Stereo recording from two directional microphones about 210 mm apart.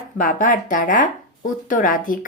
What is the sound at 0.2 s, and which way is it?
Speech, 40° left (ahead or behind).